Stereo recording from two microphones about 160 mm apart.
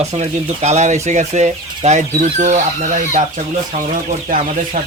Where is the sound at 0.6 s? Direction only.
45° right (ahead or behind).